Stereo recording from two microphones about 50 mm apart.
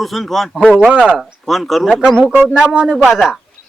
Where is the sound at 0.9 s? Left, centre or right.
Centre.